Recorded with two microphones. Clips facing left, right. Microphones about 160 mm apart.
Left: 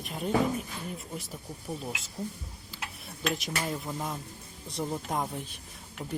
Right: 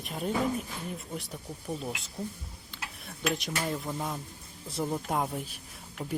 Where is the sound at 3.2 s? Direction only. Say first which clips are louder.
Right 1 dB; centre (ahead or behind).